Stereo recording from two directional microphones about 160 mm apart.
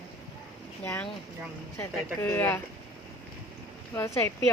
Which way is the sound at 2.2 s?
15° left (ahead or behind).